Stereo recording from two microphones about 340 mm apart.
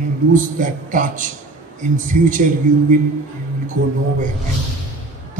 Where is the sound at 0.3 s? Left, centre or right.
Right.